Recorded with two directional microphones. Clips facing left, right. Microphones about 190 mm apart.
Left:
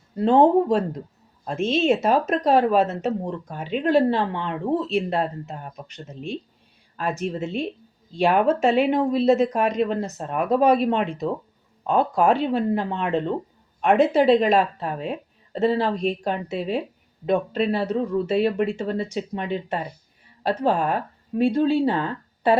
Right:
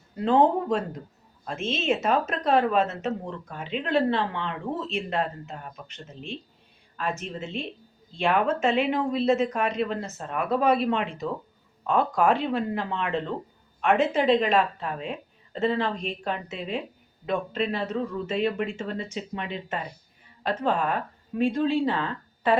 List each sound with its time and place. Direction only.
0.2 s speech: 35° left (ahead or behind)